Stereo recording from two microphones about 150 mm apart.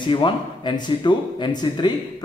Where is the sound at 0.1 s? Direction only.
30° left (ahead or behind).